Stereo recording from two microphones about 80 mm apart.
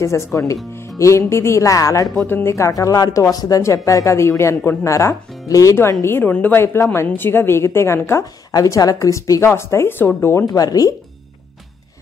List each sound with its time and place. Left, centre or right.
0.0 s speech: left
2.1 s speech: left
6.1 s a woman's voice: left
8.5 s a woman's voice: left
9.4 s speech: left
10.4 s a woman's voice: left